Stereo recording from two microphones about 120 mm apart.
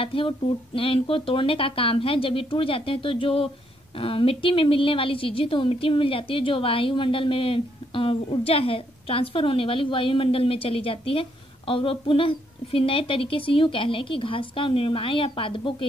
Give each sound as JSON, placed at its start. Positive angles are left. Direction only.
{"t": 0.0, "sound": "a woman's voice", "side_deg": 50}